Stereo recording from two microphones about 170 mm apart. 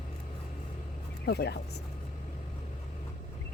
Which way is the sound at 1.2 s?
75° left (ahead or behind).